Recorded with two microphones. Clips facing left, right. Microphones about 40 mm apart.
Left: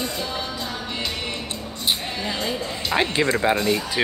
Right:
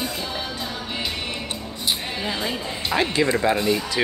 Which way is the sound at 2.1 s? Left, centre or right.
Centre.